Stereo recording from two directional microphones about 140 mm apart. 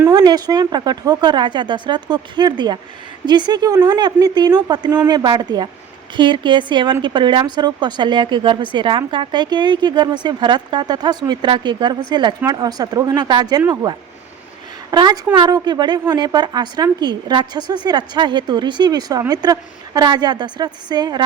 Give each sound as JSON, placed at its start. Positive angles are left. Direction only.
{"t": 0.1, "sound": "a woman's voice", "side_deg": -30}